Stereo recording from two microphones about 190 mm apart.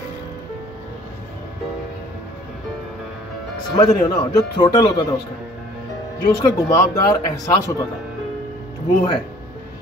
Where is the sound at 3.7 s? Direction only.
20° left (ahead or behind).